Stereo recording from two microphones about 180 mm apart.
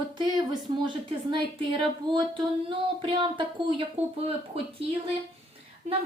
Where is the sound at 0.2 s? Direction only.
25° right (ahead or behind).